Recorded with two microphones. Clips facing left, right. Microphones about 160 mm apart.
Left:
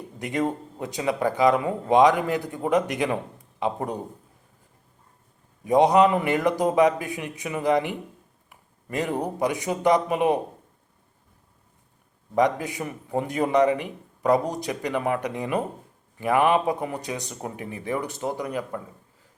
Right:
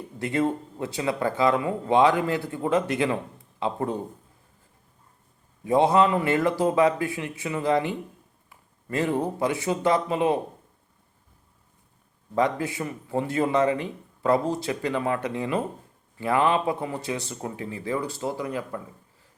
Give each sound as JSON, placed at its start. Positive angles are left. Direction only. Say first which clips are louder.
{"t": 0.2, "sound": "speech", "louder": "right 1 dB", "side_deg": 15}
{"t": 5.6, "sound": "speech", "louder": "left 2 dB", "side_deg": 15}
{"t": 12.3, "sound": "speech", "louder": "left 2 dB", "side_deg": 20}